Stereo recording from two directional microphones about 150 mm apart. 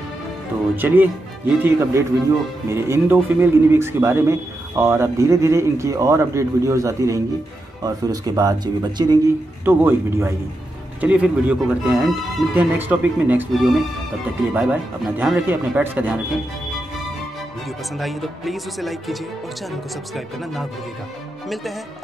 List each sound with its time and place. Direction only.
0.7 s speech: 15° right (ahead or behind)
9.7 s speech: 15° right (ahead or behind)
13.5 s speech: centre (ahead or behind)
17.9 s speech: centre (ahead or behind)